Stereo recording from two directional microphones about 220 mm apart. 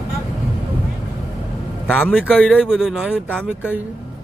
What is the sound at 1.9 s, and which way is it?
Speech, 5° left (ahead or behind).